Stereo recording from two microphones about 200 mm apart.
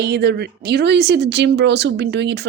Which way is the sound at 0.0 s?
55° right (ahead or behind).